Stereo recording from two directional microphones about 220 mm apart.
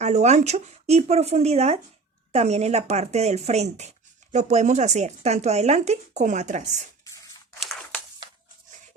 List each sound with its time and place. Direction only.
0.0 s speech: 30° right (ahead or behind)